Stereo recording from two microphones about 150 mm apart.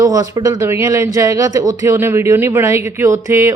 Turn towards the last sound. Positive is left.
turn(degrees=-20)  # may be behind; listen again after turning